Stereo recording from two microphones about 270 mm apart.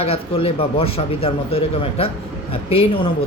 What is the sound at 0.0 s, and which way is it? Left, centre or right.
Speech, left.